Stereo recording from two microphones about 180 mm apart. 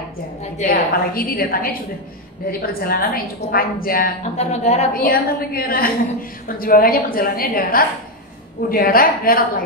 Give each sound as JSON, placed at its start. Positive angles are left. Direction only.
{"t": 0.6, "sound": "a woman's voice", "side_deg": 55}
{"t": 4.4, "sound": "a woman's voice", "side_deg": 35}
{"t": 4.9, "sound": "a woman's voice", "side_deg": 55}